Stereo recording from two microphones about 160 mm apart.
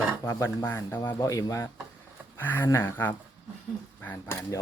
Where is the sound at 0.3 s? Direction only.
15° left (ahead or behind).